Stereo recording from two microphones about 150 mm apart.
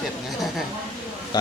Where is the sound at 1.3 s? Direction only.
30° left (ahead or behind).